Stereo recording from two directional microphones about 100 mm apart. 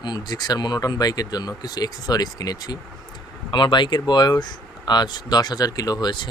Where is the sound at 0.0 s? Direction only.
45° left (ahead or behind).